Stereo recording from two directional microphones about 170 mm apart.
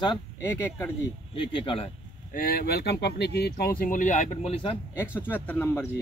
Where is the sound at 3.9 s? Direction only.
50° left (ahead or behind).